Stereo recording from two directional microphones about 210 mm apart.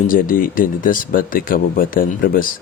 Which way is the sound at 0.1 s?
40° left (ahead or behind).